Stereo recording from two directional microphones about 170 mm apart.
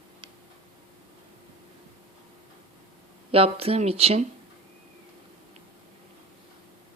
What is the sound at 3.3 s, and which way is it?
Speech, 35° right (ahead or behind).